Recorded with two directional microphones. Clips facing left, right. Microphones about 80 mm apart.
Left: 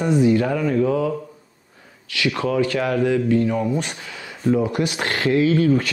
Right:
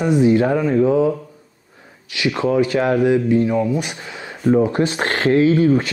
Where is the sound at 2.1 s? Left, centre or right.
Right.